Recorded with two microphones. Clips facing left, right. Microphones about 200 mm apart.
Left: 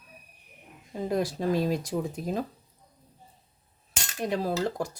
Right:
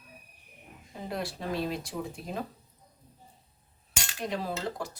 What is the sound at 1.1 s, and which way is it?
Speech, 45° left (ahead or behind).